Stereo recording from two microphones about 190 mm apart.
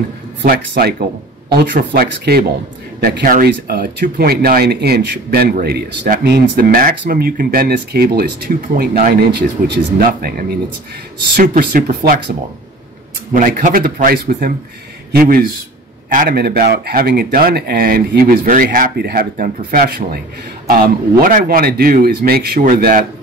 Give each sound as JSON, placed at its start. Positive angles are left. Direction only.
{"t": 0.4, "sound": "speech", "side_deg": -55}
{"t": 1.9, "sound": "speech", "side_deg": -60}